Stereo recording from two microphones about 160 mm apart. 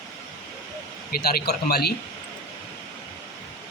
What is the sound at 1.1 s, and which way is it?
Speech, 70° left (ahead or behind).